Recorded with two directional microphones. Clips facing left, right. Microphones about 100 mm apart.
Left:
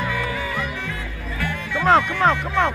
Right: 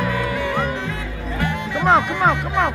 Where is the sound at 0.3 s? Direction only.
70° right (ahead or behind).